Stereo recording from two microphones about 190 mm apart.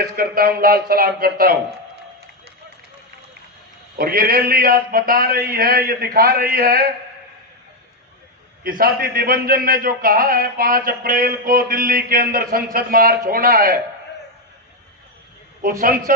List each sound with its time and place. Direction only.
0.2 s a man's voice: 55° right (ahead or behind)
3.9 s a man's voice: 50° right (ahead or behind)
8.6 s a man's voice: 50° right (ahead or behind)
15.8 s a man's voice: 50° right (ahead or behind)